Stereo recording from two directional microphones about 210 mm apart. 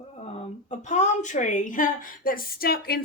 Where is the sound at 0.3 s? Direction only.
35° left (ahead or behind).